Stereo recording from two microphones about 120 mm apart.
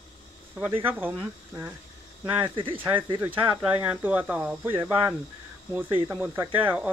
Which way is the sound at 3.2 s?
15° right (ahead or behind).